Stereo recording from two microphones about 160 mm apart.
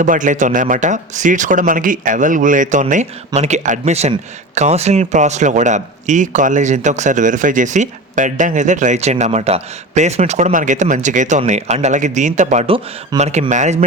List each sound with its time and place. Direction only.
0.0 s a man's voice: 55° right (ahead or behind)